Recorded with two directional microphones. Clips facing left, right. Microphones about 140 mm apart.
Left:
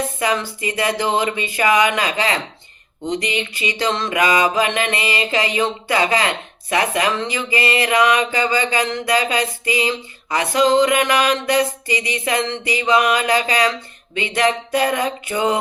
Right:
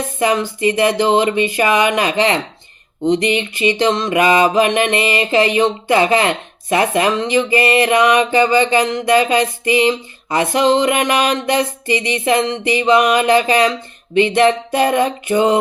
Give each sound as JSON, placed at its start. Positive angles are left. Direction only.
{"t": 0.2, "sound": "mantra", "side_deg": -20}